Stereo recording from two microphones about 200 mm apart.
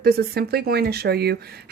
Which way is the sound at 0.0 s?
50° right (ahead or behind).